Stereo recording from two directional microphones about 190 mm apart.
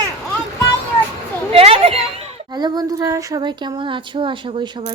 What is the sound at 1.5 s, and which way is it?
Speech, 30° right (ahead or behind).